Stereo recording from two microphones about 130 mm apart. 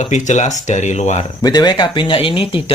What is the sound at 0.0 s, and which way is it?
Speech, 65° left (ahead or behind).